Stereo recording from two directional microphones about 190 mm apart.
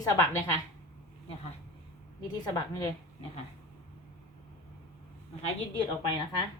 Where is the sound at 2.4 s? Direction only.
20° left (ahead or behind).